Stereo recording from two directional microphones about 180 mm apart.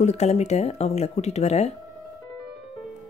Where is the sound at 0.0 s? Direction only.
35° left (ahead or behind).